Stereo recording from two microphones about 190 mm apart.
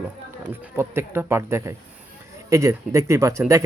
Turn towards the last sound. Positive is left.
turn(degrees=-15)  # may be behind; listen again after turning